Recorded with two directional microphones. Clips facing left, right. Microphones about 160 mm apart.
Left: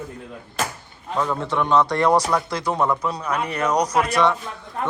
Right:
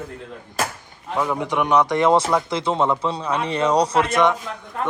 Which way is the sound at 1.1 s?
15° right (ahead or behind).